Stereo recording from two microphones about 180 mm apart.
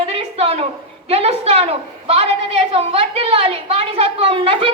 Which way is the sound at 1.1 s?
35° right (ahead or behind).